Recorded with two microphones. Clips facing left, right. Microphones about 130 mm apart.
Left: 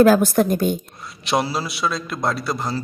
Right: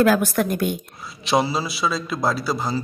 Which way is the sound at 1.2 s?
Centre (ahead or behind).